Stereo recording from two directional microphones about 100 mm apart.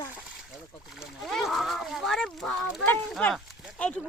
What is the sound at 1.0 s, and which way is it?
Speech, centre (ahead or behind).